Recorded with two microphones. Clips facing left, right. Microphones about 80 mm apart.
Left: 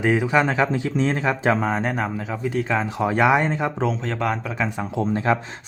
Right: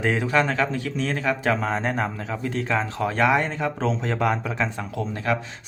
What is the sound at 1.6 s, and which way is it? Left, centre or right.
Speech, centre.